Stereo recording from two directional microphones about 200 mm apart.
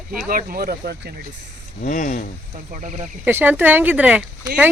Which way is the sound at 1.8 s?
40° left (ahead or behind).